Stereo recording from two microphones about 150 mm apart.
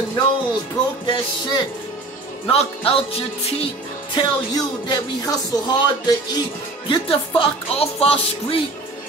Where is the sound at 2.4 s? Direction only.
40° left (ahead or behind).